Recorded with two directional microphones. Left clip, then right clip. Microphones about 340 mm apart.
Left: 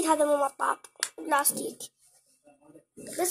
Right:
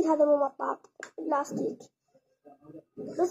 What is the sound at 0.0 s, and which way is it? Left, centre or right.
Speech, left.